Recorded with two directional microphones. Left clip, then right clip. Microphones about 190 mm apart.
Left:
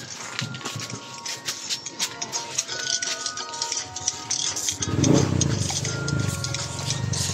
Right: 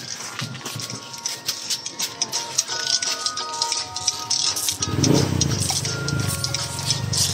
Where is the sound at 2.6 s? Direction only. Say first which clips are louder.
Right 4 dB; 35° left (ahead or behind).